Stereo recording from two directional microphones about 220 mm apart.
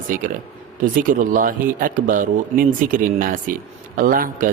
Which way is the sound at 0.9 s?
40° right (ahead or behind).